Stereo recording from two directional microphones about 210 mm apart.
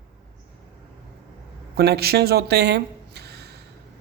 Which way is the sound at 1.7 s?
50° right (ahead or behind).